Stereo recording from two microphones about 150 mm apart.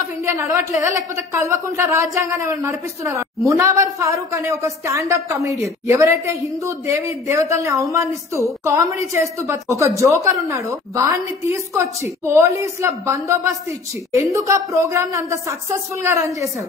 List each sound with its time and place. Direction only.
0.2 s a woman's voice: 20° right (ahead or behind)